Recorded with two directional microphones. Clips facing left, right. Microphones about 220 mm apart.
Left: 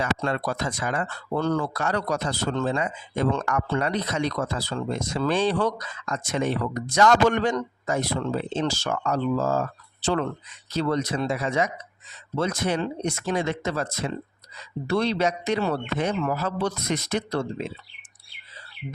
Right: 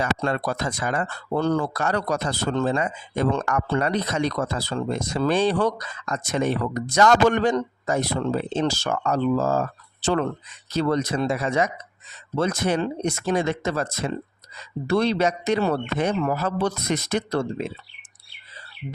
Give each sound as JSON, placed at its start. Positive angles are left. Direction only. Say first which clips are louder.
{"t": 0.0, "sound": "a man's voice", "louder": "right 2 dB", "side_deg": -40}
{"t": 10.8, "sound": "a man's voice", "louder": "right 2 dB", "side_deg": -50}